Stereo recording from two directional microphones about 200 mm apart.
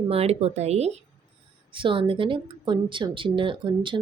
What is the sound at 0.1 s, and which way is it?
A woman's voice, 30° right (ahead or behind).